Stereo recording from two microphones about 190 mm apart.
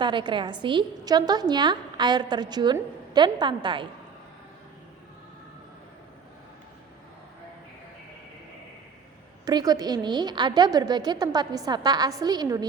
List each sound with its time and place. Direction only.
0.0 s a woman's voice: 25° right (ahead or behind)
9.5 s a woman's voice: 20° right (ahead or behind)